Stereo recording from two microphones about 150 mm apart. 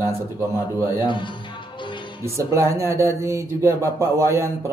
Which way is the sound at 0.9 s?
30° left (ahead or behind).